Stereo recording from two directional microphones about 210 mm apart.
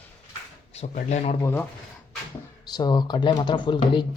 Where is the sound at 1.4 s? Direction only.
10° left (ahead or behind).